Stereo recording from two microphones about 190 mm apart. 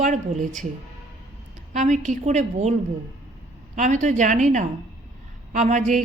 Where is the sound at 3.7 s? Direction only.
40° right (ahead or behind).